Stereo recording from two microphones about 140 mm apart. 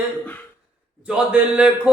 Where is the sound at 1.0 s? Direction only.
5° right (ahead or behind).